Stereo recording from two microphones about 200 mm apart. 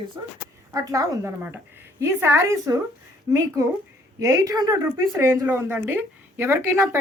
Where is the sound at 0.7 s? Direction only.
15° right (ahead or behind).